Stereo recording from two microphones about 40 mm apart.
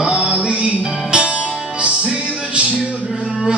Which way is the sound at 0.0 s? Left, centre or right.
Centre.